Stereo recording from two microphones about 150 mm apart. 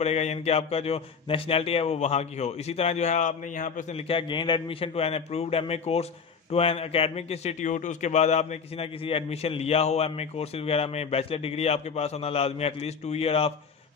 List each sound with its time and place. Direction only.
0.0 s a man's voice: 45° left (ahead or behind)
3.9 s a man's voice: 35° left (ahead or behind)